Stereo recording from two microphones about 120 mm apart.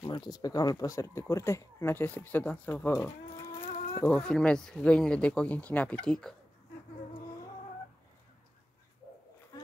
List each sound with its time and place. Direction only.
0.0 s speech: 35° left (ahead or behind); by 3.1 s 20° left (ahead or behind)
4.0 s speech: 10° left (ahead or behind)